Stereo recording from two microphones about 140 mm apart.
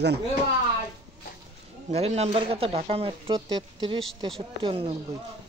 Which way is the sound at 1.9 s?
50° right (ahead or behind).